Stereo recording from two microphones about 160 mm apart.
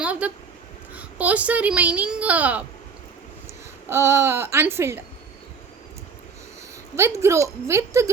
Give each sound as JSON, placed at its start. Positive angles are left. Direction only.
{"t": 0.0, "sound": "a sound", "side_deg": -10}
{"t": 0.9, "sound": "speech", "side_deg": -10}
{"t": 3.8, "sound": "speech", "side_deg": -15}
{"t": 6.9, "sound": "speech", "side_deg": -15}